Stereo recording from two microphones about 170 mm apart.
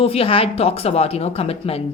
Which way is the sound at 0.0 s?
35° left (ahead or behind).